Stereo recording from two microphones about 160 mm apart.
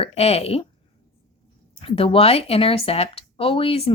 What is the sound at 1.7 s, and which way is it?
Speech, 35° left (ahead or behind).